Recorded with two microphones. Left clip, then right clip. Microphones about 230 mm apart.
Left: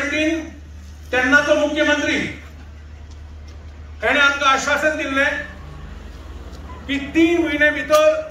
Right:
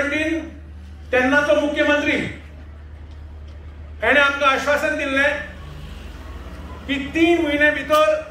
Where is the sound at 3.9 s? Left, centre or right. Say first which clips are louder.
Even; centre.